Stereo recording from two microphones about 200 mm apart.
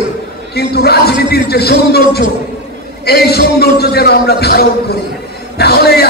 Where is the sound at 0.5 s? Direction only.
50° left (ahead or behind).